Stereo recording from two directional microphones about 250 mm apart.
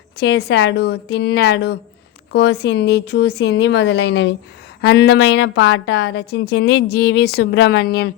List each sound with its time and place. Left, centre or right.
0.2 s a woman's voice: left